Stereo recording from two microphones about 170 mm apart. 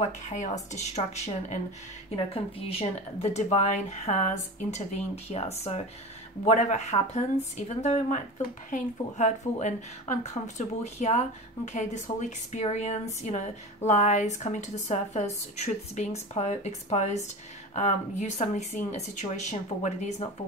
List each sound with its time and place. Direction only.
0.0 s speech: 45° left (ahead or behind)